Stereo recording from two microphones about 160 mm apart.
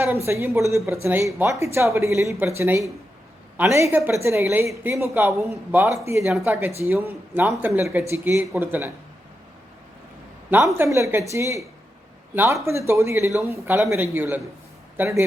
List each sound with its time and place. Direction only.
0.3 s a woman's voice: 15° right (ahead or behind)
10.5 s a woman's voice: 15° right (ahead or behind)